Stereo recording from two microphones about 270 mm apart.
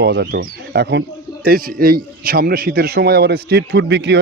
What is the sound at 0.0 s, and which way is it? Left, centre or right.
A man's voice, right.